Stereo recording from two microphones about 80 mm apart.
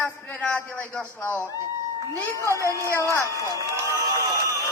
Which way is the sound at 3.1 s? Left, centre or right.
Left.